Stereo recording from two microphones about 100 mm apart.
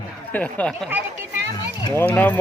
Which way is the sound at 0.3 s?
15° left (ahead or behind).